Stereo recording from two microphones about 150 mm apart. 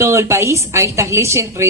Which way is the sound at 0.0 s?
20° right (ahead or behind).